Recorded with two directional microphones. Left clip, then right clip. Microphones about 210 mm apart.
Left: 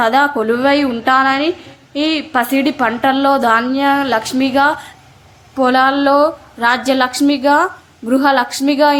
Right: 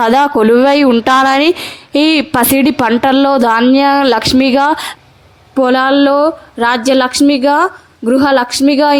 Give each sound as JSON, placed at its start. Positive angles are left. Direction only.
{"t": 0.0, "sound": "a woman's voice", "side_deg": -40}
{"t": 5.5, "sound": "a woman's voice", "side_deg": -30}